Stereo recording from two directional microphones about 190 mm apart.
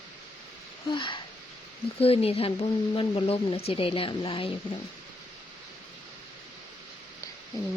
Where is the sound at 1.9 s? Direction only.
30° left (ahead or behind).